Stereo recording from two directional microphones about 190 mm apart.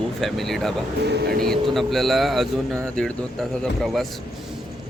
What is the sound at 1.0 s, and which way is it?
Speech, 60° right (ahead or behind).